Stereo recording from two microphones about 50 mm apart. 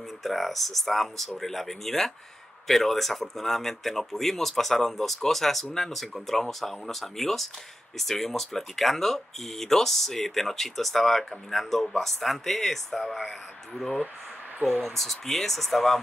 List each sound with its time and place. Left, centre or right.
0.2 s speech: centre
14.8 s speech: centre